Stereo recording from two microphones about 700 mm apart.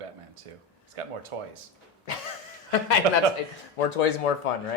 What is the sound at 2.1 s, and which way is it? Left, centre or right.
Speech, left.